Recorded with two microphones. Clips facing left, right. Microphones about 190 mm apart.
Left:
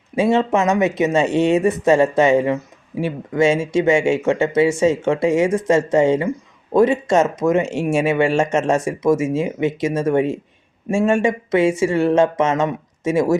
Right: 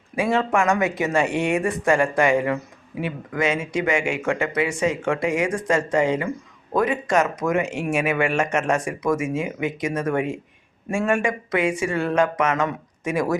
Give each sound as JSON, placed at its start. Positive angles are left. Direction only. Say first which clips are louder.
{"t": 0.2, "sound": "speech", "louder": "left 4 dB", "side_deg": 25}